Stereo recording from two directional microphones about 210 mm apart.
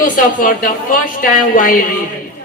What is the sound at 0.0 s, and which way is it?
A woman's voice, 40° left (ahead or behind).